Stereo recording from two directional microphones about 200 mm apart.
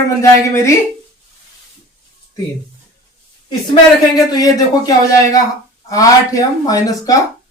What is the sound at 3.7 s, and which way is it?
Speech, 20° left (ahead or behind).